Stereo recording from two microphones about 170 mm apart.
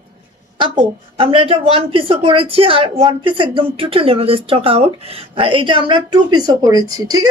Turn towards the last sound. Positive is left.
turn(degrees=-25)  # may be behind; listen again after turning